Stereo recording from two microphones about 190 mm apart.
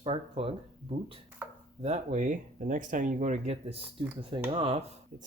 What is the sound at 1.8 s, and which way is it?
Speech, 35° right (ahead or behind).